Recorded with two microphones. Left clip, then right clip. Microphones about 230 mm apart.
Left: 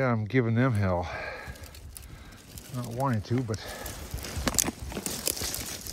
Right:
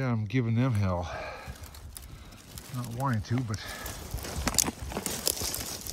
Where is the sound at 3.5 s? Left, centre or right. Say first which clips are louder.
Left 2 dB; centre.